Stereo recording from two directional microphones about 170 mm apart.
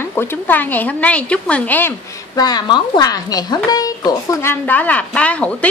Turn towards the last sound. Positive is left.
turn(degrees=5)  # may be behind; listen again after turning